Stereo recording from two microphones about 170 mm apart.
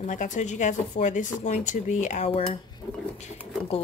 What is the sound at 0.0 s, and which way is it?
Speech, 45° left (ahead or behind).